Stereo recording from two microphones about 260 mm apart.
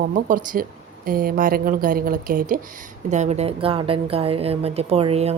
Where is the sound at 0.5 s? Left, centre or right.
Right.